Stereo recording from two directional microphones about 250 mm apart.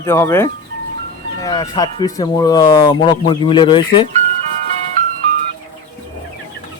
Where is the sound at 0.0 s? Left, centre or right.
Centre.